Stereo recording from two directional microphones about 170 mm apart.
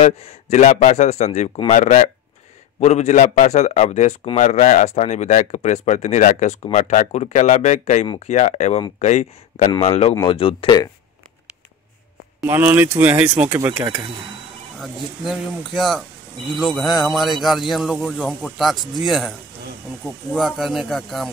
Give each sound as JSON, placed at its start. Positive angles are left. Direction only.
{"t": 0.0, "sound": "speech", "side_deg": 40}
{"t": 12.4, "sound": "speech", "side_deg": -10}
{"t": 14.8, "sound": "a man's voice", "side_deg": 0}